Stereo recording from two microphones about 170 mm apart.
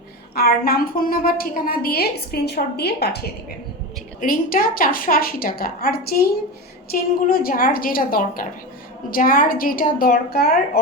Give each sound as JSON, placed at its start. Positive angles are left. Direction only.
{"t": 0.3, "sound": "a woman's voice", "side_deg": 60}
{"t": 4.2, "sound": "a woman's voice", "side_deg": 55}